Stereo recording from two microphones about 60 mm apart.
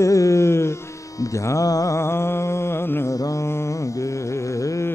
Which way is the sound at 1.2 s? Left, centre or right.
Left.